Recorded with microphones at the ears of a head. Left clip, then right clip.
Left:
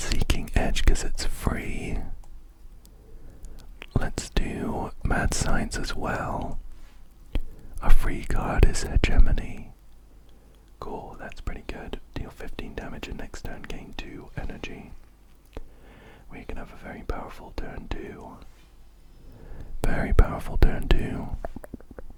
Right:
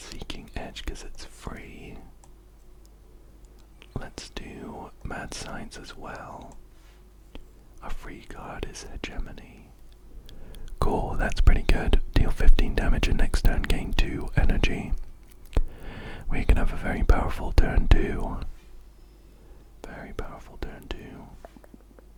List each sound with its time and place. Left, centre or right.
0.0 s whispering: left
3.8 s whispering: left
10.2 s speech: right
19.4 s speech: left